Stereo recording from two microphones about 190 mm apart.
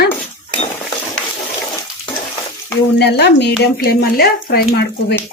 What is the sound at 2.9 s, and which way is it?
A man's voice, 60° left (ahead or behind).